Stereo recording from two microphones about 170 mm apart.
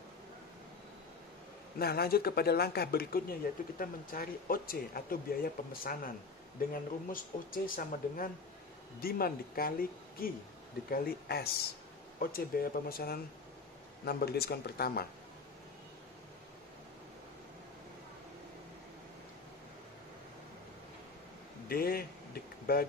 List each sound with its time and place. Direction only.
1.8 s speech: 65° left (ahead or behind)
21.6 s speech: 60° left (ahead or behind)